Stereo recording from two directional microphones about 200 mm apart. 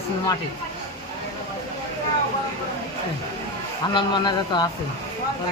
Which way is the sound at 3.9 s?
20° left (ahead or behind).